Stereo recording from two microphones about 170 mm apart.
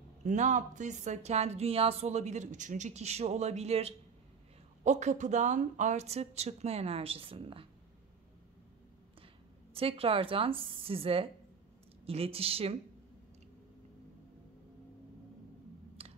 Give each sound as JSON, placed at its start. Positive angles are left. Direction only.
{"t": 0.2, "sound": "a woman's voice", "side_deg": -45}
{"t": 9.8, "sound": "a woman's voice", "side_deg": -35}
{"t": 16.0, "sound": "typing", "side_deg": -35}